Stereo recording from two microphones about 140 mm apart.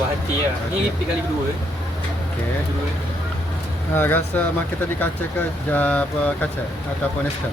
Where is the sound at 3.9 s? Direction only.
15° left (ahead or behind).